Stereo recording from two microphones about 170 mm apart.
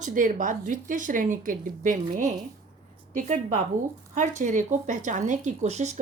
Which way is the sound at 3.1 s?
45° right (ahead or behind).